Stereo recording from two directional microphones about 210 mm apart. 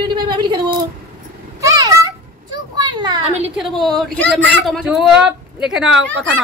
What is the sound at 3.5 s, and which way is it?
A woman's voice, centre (ahead or behind).